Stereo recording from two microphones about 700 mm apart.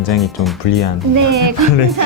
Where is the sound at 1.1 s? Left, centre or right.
Right.